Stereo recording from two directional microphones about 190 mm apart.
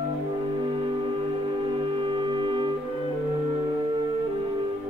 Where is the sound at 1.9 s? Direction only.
25° right (ahead or behind).